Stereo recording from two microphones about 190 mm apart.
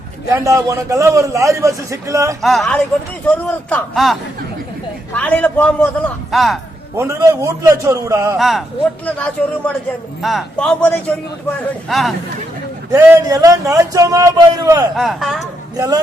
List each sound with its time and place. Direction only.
0.3 s a man's voice: 15° right (ahead or behind)
2.4 s a man's voice: centre (ahead or behind)
6.9 s a man's voice: 15° right (ahead or behind)
8.4 s a man's voice: centre (ahead or behind)
12.9 s a man's voice: 15° right (ahead or behind)
14.9 s a man's voice: centre (ahead or behind)
15.7 s a man's voice: 20° right (ahead or behind)